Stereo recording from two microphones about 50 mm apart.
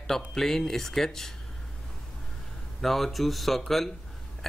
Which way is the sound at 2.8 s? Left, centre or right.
Centre.